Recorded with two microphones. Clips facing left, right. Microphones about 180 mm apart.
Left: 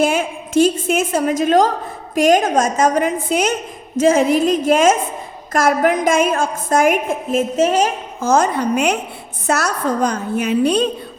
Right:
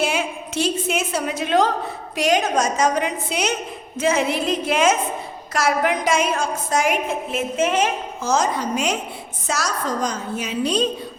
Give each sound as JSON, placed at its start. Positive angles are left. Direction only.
{"t": 0.0, "sound": "a woman's voice", "side_deg": 50}
{"t": 8.2, "sound": "a woman's voice", "side_deg": 55}